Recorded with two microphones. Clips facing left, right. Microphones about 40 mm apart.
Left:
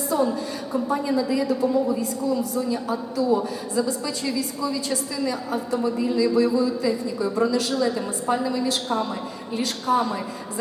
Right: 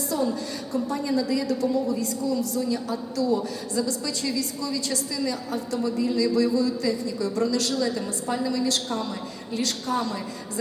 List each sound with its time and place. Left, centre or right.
0.1 s a woman's voice: centre